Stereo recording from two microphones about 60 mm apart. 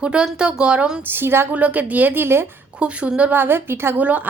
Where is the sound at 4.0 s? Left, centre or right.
Right.